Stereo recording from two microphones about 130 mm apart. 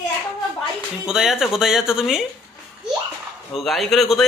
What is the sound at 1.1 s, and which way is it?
A man's voice, 5° right (ahead or behind).